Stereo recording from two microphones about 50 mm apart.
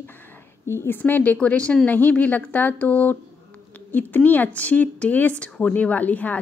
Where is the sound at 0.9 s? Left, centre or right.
Left.